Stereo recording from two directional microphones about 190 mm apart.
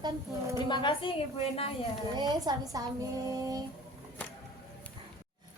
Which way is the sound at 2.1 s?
20° right (ahead or behind).